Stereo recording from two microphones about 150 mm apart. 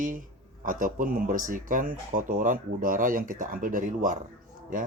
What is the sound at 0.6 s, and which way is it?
Speech, 60° right (ahead or behind).